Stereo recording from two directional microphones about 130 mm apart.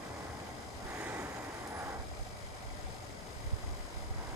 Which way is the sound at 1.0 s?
15° right (ahead or behind).